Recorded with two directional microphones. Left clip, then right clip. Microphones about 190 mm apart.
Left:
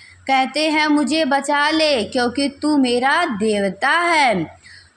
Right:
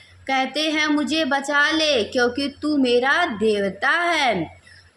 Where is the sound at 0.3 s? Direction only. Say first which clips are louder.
Left 4 dB; 25° left (ahead or behind).